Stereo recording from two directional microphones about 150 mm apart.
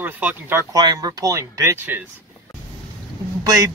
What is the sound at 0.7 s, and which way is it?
Speech, 25° right (ahead or behind).